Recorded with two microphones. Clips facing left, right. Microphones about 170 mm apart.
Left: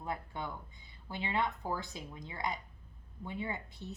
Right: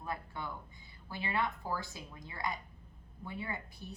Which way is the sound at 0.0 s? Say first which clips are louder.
Left 1 dB; 20° left (ahead or behind).